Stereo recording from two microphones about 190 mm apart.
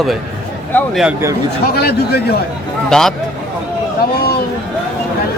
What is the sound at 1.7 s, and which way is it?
Speech, 55° left (ahead or behind).